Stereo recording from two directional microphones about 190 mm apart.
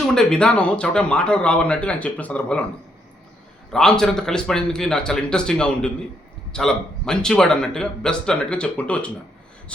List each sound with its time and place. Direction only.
0.1 s a man's voice: 5° left (ahead or behind)
3.7 s a man's voice: 5° left (ahead or behind)